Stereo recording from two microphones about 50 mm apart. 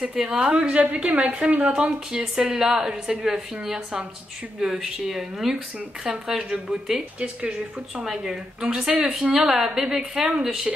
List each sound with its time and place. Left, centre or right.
0.1 s a woman's voice: centre